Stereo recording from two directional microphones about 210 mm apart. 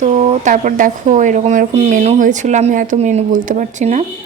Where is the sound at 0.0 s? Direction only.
30° right (ahead or behind).